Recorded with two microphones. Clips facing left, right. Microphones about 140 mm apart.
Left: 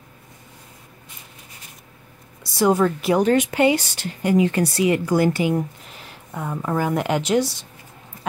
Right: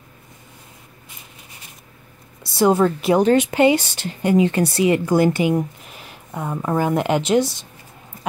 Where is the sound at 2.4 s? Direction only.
25° right (ahead or behind).